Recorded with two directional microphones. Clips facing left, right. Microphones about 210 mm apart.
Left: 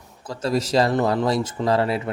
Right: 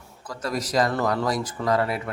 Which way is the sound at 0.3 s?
25° left (ahead or behind).